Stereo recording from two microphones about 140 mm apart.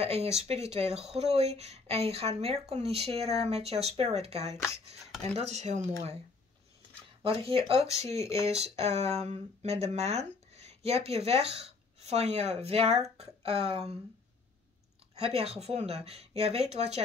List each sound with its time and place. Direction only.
0.0 s speech: 50° right (ahead or behind)
7.2 s speech: 40° right (ahead or behind)
15.1 s speech: 45° right (ahead or behind)